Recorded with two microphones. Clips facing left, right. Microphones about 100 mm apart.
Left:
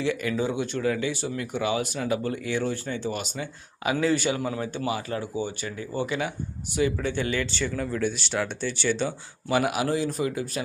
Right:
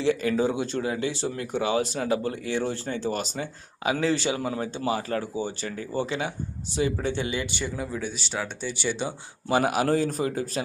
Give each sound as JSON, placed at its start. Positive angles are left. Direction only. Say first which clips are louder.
{"t": 0.0, "sound": "speech", "louder": "right 3 dB", "side_deg": -30}
{"t": 9.5, "sound": "speech", "louder": "right 2 dB", "side_deg": -40}